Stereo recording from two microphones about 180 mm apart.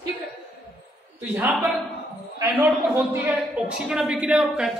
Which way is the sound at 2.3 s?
15° right (ahead or behind).